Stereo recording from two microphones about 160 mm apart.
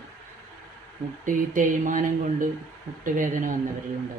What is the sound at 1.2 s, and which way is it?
Speech, 55° right (ahead or behind).